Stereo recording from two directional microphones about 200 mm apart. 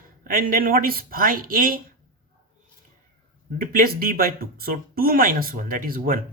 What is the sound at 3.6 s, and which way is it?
Speech, 45° right (ahead or behind).